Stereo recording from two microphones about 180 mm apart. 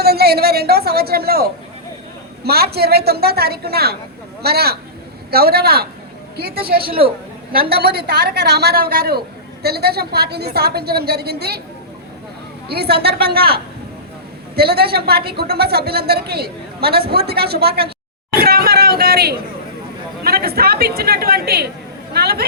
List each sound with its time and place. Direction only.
0.0 s a woman's voice: 60° right (ahead or behind)
12.6 s a woman's voice: 60° right (ahead or behind)
18.3 s a sound: 55° right (ahead or behind)
20.2 s a woman's voice: 60° right (ahead or behind)